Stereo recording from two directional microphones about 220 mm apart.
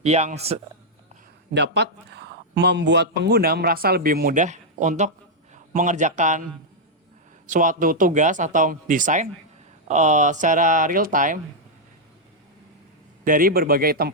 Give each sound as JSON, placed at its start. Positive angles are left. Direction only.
{"t": 0.0, "sound": "a man's voice", "side_deg": -30}
{"t": 1.5, "sound": "speech", "side_deg": -50}
{"t": 7.4, "sound": "speech", "side_deg": -35}
{"t": 13.2, "sound": "speech", "side_deg": -40}